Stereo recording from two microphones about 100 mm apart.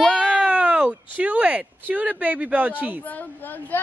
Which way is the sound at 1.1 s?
15° right (ahead or behind).